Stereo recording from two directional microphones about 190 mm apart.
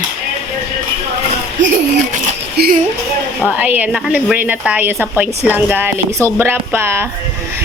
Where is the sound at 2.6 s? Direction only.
60° right (ahead or behind).